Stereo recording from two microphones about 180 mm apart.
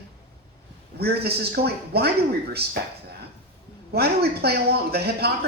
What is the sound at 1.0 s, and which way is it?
A man's voice, 60° right (ahead or behind).